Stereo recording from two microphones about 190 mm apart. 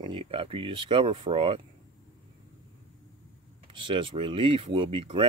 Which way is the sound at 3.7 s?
25° right (ahead or behind).